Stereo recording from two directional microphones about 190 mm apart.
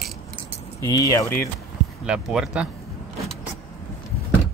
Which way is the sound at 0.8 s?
20° left (ahead or behind).